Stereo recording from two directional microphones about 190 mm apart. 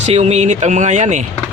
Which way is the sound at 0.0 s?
35° right (ahead or behind).